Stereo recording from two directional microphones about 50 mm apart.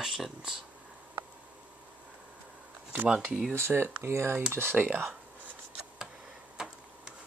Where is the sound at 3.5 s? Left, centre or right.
Right.